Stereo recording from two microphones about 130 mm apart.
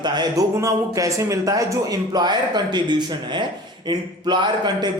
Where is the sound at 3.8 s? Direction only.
35° right (ahead or behind).